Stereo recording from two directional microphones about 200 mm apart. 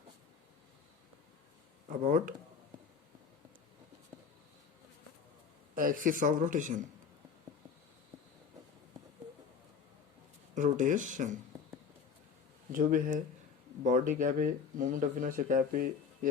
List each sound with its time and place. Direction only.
1.9 s speech: 45° right (ahead or behind)
5.7 s speech: 45° right (ahead or behind)
10.5 s speech: 40° right (ahead or behind)
12.7 s speech: 45° right (ahead or behind)